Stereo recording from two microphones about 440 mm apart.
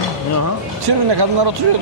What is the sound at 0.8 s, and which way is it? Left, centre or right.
Speech, right.